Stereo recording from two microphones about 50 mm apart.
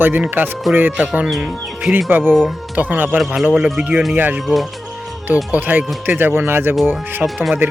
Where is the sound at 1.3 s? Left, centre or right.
Centre.